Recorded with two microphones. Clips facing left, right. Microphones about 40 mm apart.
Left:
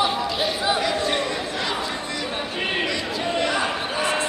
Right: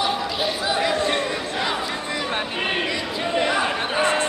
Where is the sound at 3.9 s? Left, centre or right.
Right.